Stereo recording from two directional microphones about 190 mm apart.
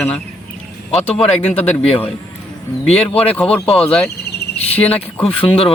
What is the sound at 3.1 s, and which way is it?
Speech, 5° left (ahead or behind).